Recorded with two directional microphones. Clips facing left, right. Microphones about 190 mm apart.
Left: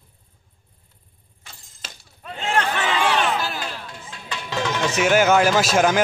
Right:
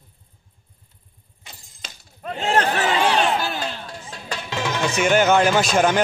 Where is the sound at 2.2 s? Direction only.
35° right (ahead or behind).